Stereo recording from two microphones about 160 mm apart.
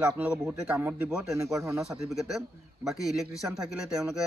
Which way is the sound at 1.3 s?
20° right (ahead or behind).